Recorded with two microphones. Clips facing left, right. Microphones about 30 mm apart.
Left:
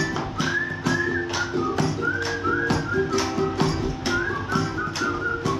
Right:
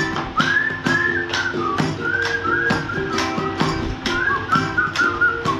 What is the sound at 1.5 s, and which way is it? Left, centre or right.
Whistling, right.